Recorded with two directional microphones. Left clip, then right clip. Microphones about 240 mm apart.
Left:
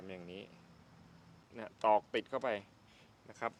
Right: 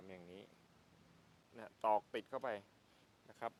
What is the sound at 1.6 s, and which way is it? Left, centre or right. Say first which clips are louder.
Speech: left 6 dB; centre.